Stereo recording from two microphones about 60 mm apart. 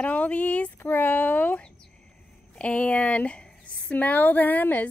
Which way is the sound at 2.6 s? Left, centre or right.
Left.